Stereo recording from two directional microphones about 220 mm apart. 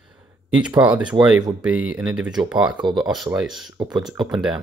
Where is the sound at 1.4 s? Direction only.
20° right (ahead or behind).